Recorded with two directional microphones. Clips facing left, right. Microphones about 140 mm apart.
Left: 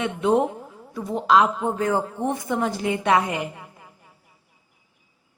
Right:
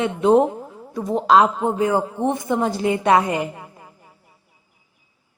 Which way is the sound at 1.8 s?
15° right (ahead or behind).